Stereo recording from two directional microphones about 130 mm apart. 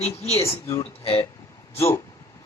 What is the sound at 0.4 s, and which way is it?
Speech, 25° left (ahead or behind).